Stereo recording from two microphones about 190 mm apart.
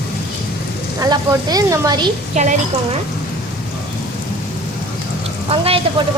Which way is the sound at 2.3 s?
40° right (ahead or behind).